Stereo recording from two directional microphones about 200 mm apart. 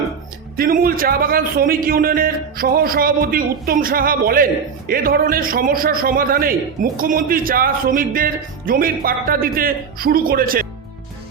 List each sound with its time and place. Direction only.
0.5 s speech: 45° right (ahead or behind)